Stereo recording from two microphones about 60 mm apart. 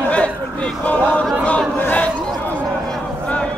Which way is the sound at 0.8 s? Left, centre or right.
Left.